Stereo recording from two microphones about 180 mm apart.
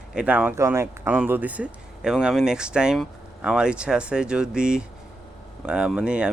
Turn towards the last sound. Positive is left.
turn(degrees=-5)  # may be behind; listen again after turning